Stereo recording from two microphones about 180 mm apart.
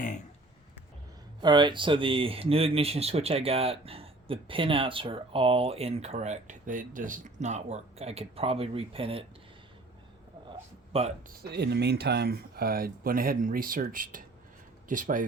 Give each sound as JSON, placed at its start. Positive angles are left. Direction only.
{"t": 1.4, "sound": "speech", "side_deg": -25}
{"t": 10.9, "sound": "speech", "side_deg": -35}
{"t": 11.3, "sound": "speech", "side_deg": -65}